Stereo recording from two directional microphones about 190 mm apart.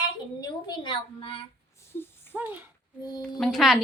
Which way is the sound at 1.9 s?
10° left (ahead or behind).